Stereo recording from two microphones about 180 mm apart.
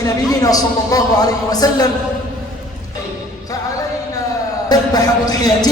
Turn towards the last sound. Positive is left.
turn(degrees=20)  # may be behind; listen again after turning